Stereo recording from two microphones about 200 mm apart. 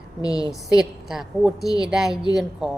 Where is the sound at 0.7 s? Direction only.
Centre (ahead or behind).